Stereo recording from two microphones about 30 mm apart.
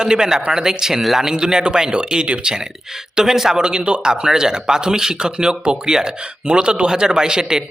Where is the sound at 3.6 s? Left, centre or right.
Right.